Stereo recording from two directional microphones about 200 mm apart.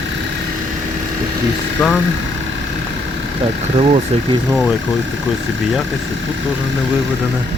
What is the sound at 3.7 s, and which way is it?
Speech, 30° right (ahead or behind).